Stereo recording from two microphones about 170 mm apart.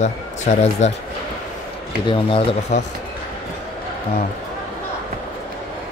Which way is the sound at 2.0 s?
35° left (ahead or behind).